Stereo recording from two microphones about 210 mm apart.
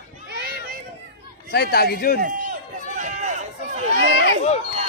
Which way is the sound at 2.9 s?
35° right (ahead or behind).